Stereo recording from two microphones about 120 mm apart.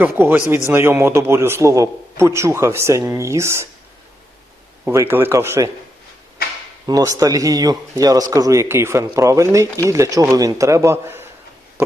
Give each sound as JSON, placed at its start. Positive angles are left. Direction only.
{"t": 0.0, "sound": "a man's voice", "side_deg": -15}
{"t": 4.9, "sound": "a man's voice", "side_deg": -20}
{"t": 6.8, "sound": "a man's voice", "side_deg": -30}